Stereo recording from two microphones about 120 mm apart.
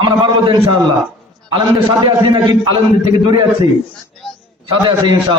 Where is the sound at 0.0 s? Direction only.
40° right (ahead or behind).